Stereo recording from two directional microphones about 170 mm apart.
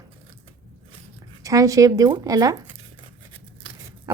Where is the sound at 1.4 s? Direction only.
20° right (ahead or behind).